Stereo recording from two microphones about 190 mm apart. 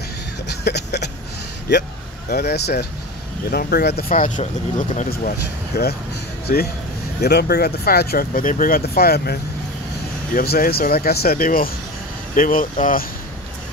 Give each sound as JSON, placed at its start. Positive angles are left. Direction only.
{"t": 0.5, "sound": "a sound", "side_deg": 60}
{"t": 1.7, "sound": "speech", "side_deg": 60}
{"t": 5.7, "sound": "speech", "side_deg": 55}